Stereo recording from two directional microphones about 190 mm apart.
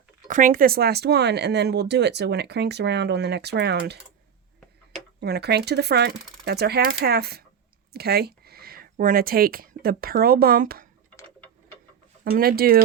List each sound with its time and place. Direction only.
0.3 s speech: 45° right (ahead or behind); by 3.9 s 60° right (ahead or behind)
5.2 s speech: 60° right (ahead or behind)
12.2 s speech: 50° right (ahead or behind)